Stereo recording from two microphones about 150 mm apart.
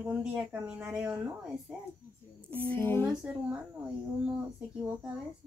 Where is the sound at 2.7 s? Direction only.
15° left (ahead or behind).